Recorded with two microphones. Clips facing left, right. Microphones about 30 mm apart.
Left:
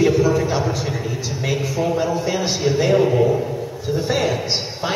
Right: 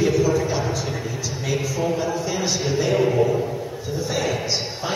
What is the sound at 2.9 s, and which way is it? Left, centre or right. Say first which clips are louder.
Speech: left 2 dB; centre.